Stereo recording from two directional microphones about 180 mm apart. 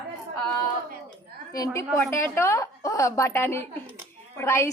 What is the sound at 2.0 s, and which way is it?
A woman's voice, 15° left (ahead or behind).